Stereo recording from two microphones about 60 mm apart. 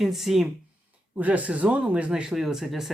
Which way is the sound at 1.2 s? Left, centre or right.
Right.